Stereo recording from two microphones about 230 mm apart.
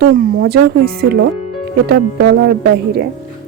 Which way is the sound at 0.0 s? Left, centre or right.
Right.